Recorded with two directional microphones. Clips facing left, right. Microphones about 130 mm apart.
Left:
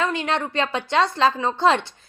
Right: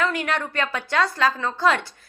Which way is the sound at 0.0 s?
25° left (ahead or behind).